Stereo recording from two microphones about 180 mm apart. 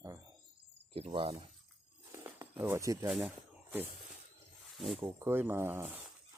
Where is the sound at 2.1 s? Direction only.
15° right (ahead or behind).